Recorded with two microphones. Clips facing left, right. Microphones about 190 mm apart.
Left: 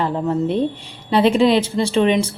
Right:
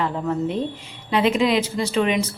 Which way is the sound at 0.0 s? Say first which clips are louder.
Left 4 dB; 35° left (ahead or behind).